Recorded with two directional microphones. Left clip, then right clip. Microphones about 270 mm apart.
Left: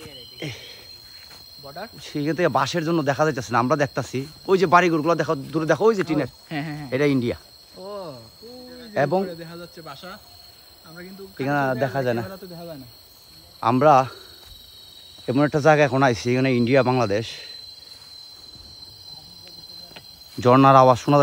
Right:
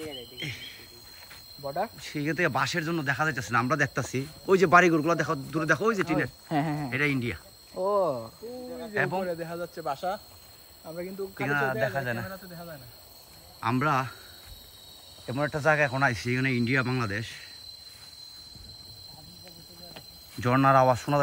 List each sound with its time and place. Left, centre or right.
0.4 s insect: centre
1.6 s speech: right
2.0 s speech: centre
6.5 s speech: right
6.9 s speech: centre
7.8 s cricket: right
8.9 s speech: centre
9.2 s speech: centre
11.3 s speech: centre
11.7 s speech: right
13.6 s speech: centre
16.1 s speech: centre
20.3 s speech: centre